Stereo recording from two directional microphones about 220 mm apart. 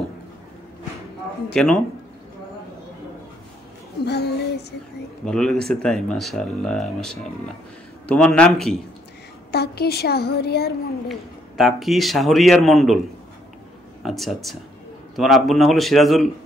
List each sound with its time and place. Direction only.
1.5 s speech: 5° left (ahead or behind)
4.0 s speech: 50° left (ahead or behind)
5.2 s speech: 5° left (ahead or behind)
9.5 s a woman's voice: 45° left (ahead or behind)
11.1 s speech: centre (ahead or behind)
14.0 s speech: centre (ahead or behind)